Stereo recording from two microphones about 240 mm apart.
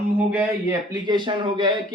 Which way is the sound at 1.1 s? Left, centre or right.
Centre.